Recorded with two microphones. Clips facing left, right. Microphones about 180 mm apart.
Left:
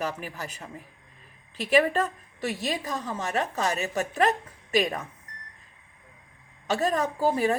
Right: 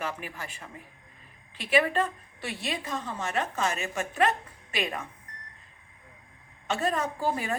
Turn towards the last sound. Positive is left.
turn(degrees=35)  # may be behind; listen again after turning